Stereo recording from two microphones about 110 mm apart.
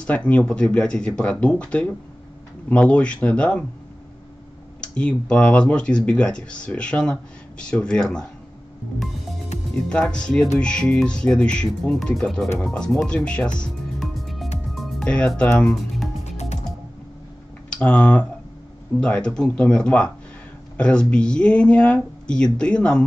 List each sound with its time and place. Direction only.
0.0 s speech: 10° left (ahead or behind)
4.9 s speech: 10° left (ahead or behind)
9.8 s speech: 10° left (ahead or behind)
14.8 s music: centre (ahead or behind)
15.0 s speech: 10° left (ahead or behind)
16.3 s music: 90° left
17.6 s speech: 10° left (ahead or behind)